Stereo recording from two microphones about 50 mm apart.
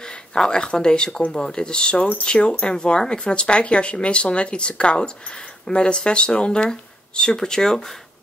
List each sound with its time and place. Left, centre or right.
0.0 s speech: centre